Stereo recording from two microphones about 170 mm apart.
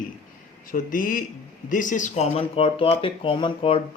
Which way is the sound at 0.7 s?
55° left (ahead or behind).